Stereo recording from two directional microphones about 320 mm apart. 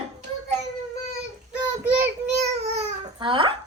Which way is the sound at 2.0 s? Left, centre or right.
Right.